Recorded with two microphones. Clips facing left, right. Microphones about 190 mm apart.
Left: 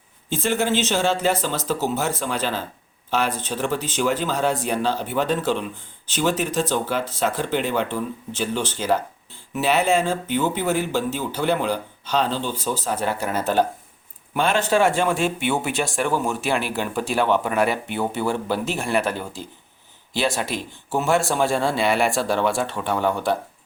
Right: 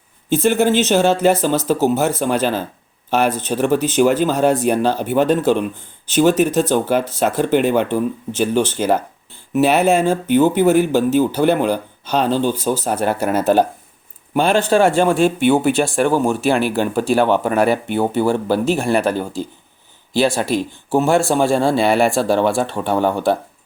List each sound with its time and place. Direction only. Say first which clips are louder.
0.3 s speech: right 8 dB; 60° right (ahead or behind)
1.1 s speech: right 7 dB; 45° right (ahead or behind)
9.5 s speech: right 6 dB; 55° right (ahead or behind)
14.3 s a man's voice: right 5 dB; 35° right (ahead or behind)